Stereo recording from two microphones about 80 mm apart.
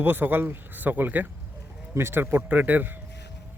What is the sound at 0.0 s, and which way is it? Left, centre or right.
A man's voice, right.